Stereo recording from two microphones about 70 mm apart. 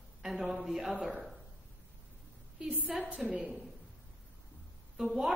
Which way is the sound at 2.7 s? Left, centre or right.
Right.